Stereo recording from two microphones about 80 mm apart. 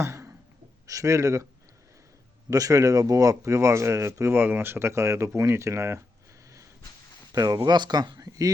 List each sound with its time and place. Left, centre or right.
0.0 s a sound: right
0.9 s speech: right
2.5 s speech: right
4.4 s speech: right
7.3 s speech: right
7.7 s speech: right
8.2 s a sound: right